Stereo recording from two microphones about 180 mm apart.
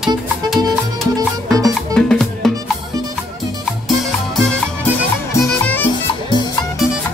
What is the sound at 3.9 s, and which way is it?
Music, centre (ahead or behind).